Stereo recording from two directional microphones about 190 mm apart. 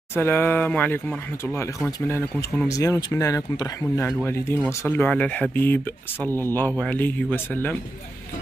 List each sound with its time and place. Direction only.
0.1 s speech: 10° left (ahead or behind)
2.7 s speech: 15° left (ahead or behind)